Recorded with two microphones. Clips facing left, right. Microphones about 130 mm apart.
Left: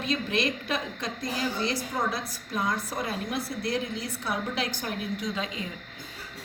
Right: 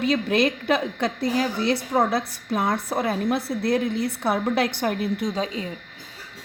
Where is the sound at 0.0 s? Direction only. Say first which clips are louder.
Right 7 dB; 60° right (ahead or behind).